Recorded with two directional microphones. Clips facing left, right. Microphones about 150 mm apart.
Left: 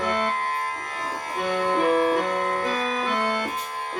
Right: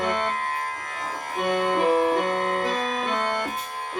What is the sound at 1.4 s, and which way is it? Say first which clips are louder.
Music: right 1 dB; 15° right (ahead or behind).